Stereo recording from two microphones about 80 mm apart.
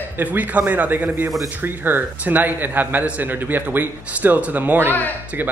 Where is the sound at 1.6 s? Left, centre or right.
Right.